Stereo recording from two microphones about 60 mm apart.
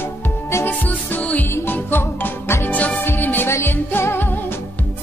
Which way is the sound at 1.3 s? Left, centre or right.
Left.